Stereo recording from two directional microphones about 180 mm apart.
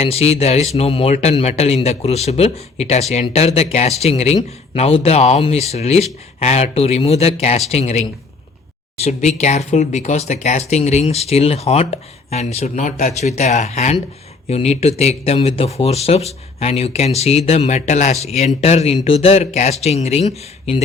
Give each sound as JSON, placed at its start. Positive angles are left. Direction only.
{"t": 0.0, "sound": "speech", "side_deg": 35}